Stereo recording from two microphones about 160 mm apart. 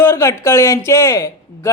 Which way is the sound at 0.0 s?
15° left (ahead or behind).